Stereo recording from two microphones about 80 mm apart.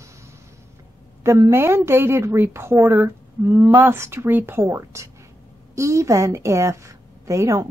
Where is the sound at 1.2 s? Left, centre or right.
Right.